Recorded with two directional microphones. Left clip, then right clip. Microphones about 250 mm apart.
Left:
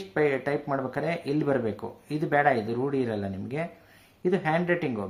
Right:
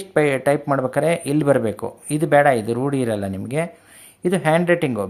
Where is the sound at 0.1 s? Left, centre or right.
Right.